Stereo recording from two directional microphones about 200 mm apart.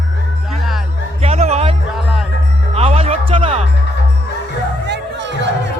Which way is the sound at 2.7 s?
30° right (ahead or behind).